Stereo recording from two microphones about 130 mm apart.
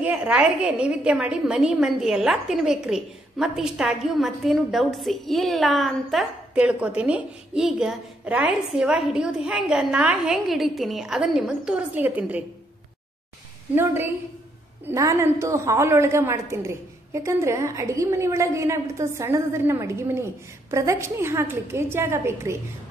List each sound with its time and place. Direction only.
0.0 s a woman's voice: 10° right (ahead or behind)
6.5 s a woman's voice: 10° right (ahead or behind)
13.7 s a woman's voice: 15° right (ahead or behind)